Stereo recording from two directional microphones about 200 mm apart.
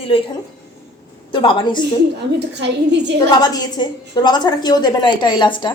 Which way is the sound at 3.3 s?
20° left (ahead or behind).